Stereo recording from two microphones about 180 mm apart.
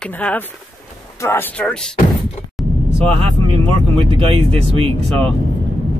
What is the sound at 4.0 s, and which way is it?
Speech, 30° right (ahead or behind).